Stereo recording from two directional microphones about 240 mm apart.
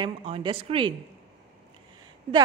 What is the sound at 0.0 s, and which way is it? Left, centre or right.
Speech, right.